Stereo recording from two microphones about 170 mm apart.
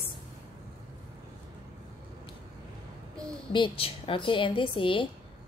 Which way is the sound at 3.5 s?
30° left (ahead or behind).